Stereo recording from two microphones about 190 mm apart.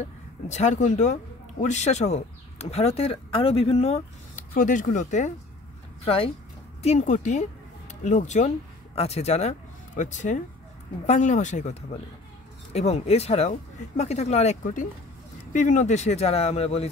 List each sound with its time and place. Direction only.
0.5 s speech: 35° left (ahead or behind)
6.0 s speech: 30° left (ahead or behind)